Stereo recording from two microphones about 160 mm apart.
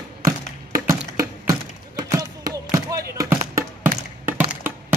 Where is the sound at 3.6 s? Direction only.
10° right (ahead or behind).